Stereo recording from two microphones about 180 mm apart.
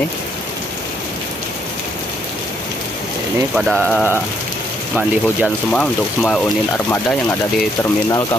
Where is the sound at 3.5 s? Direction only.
Centre (ahead or behind).